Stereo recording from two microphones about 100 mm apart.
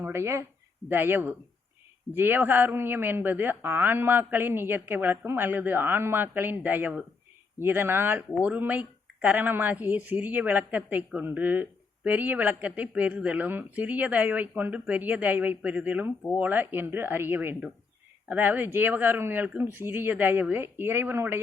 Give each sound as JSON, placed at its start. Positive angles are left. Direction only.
{"t": 0.0, "sound": "speech", "side_deg": -25}